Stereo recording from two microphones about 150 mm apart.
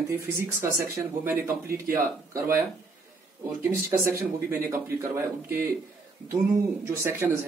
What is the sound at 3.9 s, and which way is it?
Speech, 15° right (ahead or behind).